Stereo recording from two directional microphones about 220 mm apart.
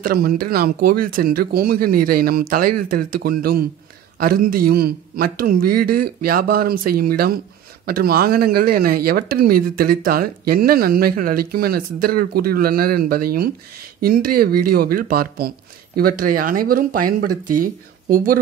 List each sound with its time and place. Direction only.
0.0 s speech: 40° right (ahead or behind)
18.1 s speech: 40° right (ahead or behind)